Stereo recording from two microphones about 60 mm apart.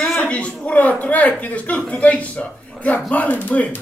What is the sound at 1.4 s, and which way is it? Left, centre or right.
Speech, left.